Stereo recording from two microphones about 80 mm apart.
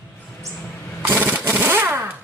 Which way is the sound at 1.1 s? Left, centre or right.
Centre.